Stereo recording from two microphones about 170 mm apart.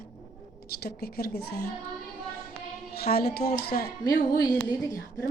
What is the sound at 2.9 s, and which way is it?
A woman's voice, 65° left (ahead or behind).